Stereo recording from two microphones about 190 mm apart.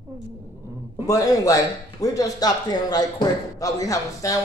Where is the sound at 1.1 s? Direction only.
20° left (ahead or behind).